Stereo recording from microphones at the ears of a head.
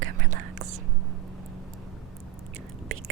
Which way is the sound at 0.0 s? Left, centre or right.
Right.